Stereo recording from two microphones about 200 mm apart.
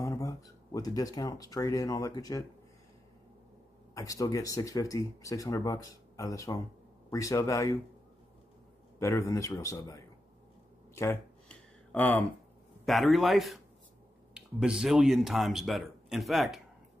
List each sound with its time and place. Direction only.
0.0 s speech: 15° left (ahead or behind)
3.9 s speech: 15° left (ahead or behind)
9.0 s speech: 15° left (ahead or behind)
11.0 s a sound: 10° left (ahead or behind)
12.8 s speech: centre (ahead or behind)